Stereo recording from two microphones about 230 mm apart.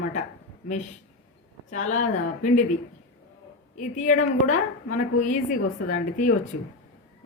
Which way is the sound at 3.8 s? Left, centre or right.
Left.